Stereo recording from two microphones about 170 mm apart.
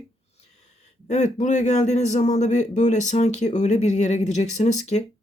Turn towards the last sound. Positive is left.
turn(degrees=40)  # may be behind; listen again after turning